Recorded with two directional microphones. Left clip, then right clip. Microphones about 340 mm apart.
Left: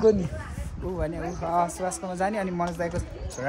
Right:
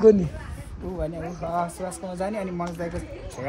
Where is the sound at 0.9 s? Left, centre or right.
Centre.